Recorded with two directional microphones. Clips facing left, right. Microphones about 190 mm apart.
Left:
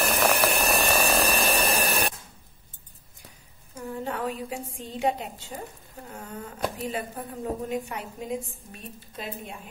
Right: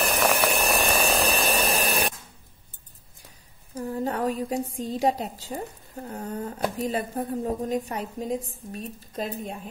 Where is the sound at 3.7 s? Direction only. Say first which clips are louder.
Right 4 dB; 35° right (ahead or behind).